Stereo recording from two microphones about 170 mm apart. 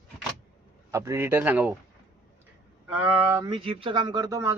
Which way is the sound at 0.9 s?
15° right (ahead or behind).